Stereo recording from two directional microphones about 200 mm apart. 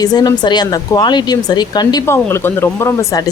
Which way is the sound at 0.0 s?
20° left (ahead or behind).